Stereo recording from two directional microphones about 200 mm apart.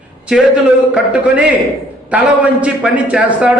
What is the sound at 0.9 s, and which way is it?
A man's voice, 5° right (ahead or behind).